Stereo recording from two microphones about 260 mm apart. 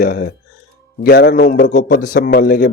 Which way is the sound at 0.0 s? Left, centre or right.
Left.